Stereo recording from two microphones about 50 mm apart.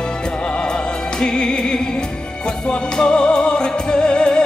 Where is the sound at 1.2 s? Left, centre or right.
Centre.